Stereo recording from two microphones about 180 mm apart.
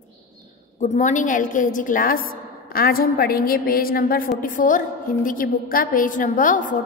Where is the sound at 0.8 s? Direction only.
45° left (ahead or behind).